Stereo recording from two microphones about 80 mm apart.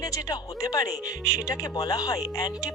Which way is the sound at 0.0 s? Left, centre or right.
Left.